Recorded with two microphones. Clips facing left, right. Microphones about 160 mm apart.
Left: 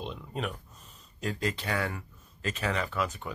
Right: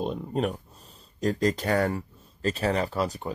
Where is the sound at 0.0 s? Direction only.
40° right (ahead or behind).